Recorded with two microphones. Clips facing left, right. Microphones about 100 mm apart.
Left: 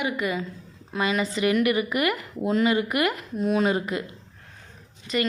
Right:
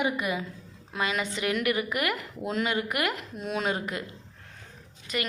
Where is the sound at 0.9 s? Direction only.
Centre (ahead or behind).